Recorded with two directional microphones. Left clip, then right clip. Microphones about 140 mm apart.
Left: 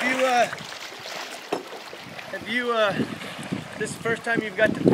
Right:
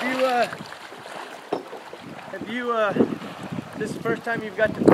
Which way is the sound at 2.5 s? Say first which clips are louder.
Left 1 dB; 25° left (ahead or behind).